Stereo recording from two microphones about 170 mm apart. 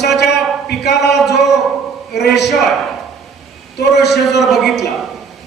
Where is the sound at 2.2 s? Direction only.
75° left (ahead or behind).